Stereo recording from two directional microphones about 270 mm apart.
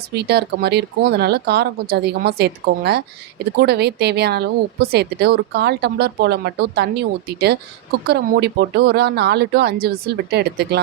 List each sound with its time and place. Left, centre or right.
0.1 s speech: right